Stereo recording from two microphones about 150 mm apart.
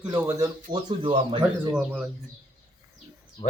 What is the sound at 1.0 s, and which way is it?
Speech, 35° right (ahead or behind).